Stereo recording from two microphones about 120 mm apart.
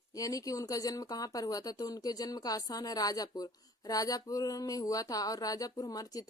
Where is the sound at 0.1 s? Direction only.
30° left (ahead or behind).